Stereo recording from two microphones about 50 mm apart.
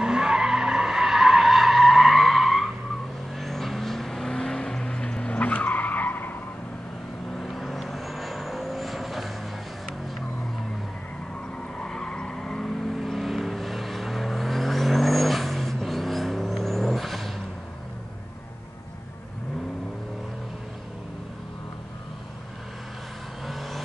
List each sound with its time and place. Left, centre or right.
0.0 s skidding: centre
3.3 s vehicle: centre; by 6.3 s left
7.3 s vehicle: centre
11.8 s vehicle: centre
12.8 s vehicle: centre
23.4 s vehicle: centre